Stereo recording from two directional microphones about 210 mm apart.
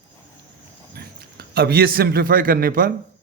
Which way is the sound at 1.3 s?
50° right (ahead or behind).